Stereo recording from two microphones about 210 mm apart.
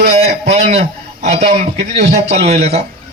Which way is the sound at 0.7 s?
30° right (ahead or behind).